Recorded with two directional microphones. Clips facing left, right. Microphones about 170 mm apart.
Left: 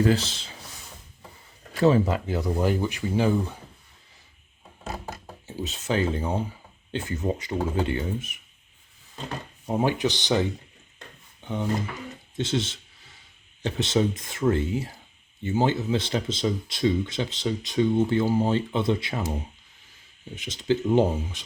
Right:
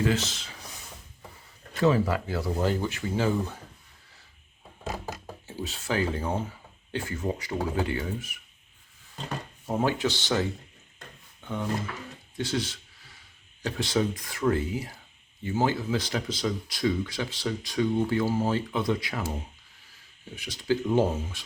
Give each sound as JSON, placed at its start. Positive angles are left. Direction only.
{"t": 0.0, "sound": "speech", "side_deg": 35}
{"t": 1.8, "sound": "speech", "side_deg": 25}
{"t": 5.5, "sound": "speech", "side_deg": 20}
{"t": 9.6, "sound": "speech", "side_deg": 15}
{"t": 11.3, "sound": "drawer open or close", "side_deg": 20}
{"t": 12.4, "sound": "a sound", "side_deg": 25}
{"t": 13.6, "sound": "speech", "side_deg": 25}
{"t": 20.3, "sound": "speech", "side_deg": 20}